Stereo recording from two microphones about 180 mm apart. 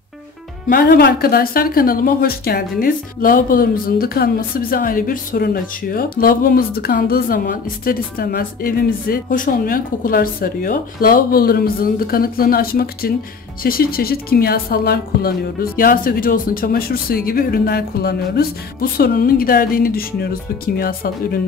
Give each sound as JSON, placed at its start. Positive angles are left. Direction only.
{"t": 0.7, "sound": "a woman's voice", "side_deg": 65}